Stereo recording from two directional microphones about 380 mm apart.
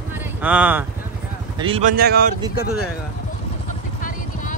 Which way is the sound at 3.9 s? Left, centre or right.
Left.